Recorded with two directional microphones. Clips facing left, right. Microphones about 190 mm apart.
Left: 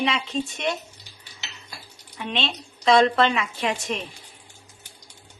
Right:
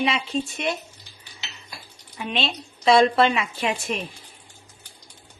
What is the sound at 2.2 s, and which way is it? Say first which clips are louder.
Speech: right 1 dB; 5° right (ahead or behind).